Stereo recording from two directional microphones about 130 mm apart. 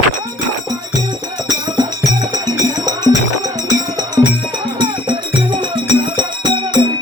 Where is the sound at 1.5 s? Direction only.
30° right (ahead or behind).